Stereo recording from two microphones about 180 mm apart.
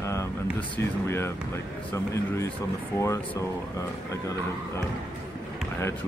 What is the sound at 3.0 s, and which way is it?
Speech, 15° left (ahead or behind).